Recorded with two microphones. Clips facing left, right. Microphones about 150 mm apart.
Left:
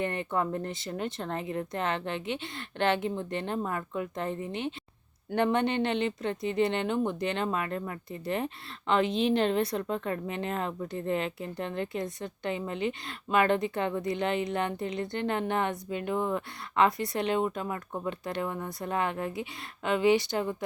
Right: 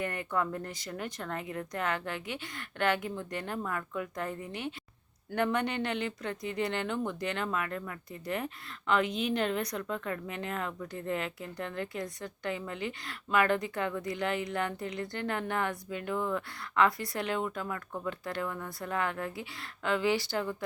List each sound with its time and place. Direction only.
0.0 s speech: 25° left (ahead or behind)